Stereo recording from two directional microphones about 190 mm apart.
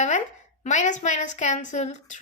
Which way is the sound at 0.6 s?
40° left (ahead or behind).